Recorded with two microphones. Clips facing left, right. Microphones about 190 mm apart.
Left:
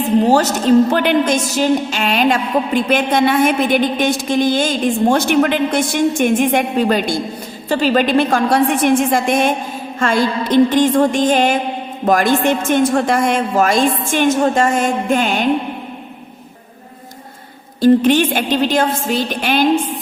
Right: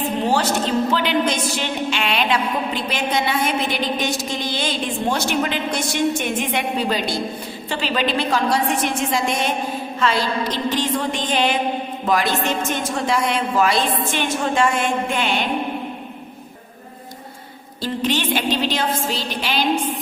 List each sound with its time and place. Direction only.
0.3 s a woman's voice: 45° left (ahead or behind)
17.7 s a woman's voice: 50° left (ahead or behind)